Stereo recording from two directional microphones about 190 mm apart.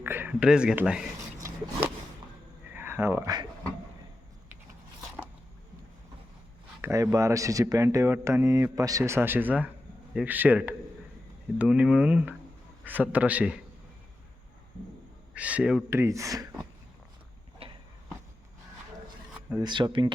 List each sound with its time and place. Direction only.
0.0 s speech: 10° right (ahead or behind)
1.4 s rub: 15° right (ahead or behind)
2.7 s a sound: 10° right (ahead or behind)
6.8 s speech: 15° right (ahead or behind)
15.4 s speech: 5° right (ahead or behind)
17.6 s a sound: 30° right (ahead or behind)
19.6 s speech: 25° right (ahead or behind)